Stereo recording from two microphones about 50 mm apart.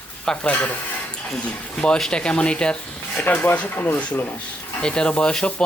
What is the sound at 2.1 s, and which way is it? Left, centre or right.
Speech, left.